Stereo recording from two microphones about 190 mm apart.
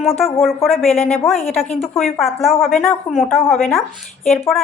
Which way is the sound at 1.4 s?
35° left (ahead or behind).